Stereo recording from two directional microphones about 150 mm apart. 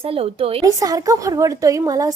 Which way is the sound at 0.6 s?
25° right (ahead or behind).